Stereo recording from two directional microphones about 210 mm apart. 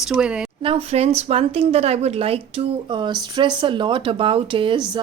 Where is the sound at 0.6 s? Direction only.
25° right (ahead or behind).